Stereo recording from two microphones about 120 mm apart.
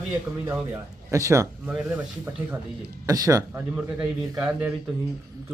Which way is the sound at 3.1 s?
30° right (ahead or behind).